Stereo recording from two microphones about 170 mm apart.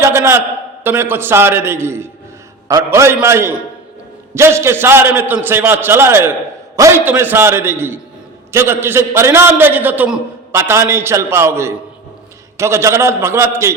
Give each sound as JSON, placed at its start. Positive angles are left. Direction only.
{"t": 0.0, "sound": "a man's voice", "side_deg": -15}